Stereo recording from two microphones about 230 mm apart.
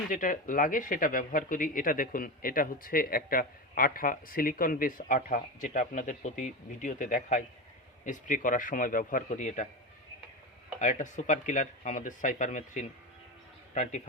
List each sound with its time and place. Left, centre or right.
0.1 s speech: left
10.8 s speech: left